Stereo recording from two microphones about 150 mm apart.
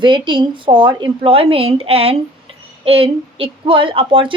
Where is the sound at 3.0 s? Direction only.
35° right (ahead or behind).